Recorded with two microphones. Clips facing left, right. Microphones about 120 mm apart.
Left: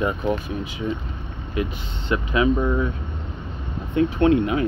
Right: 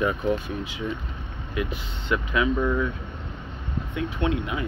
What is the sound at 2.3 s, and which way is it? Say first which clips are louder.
Speech: left 4 dB; 25° left (ahead or behind).